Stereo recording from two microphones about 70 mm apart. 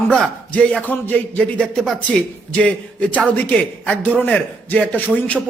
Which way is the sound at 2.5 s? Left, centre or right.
Left.